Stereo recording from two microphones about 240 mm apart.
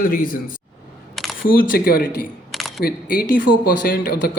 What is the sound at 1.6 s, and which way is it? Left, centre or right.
Speech, left.